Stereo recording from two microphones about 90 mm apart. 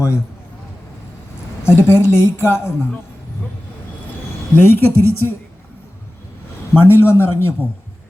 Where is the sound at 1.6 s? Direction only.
30° left (ahead or behind).